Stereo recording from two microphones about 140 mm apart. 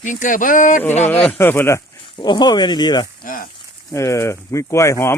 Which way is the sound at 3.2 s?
85° left.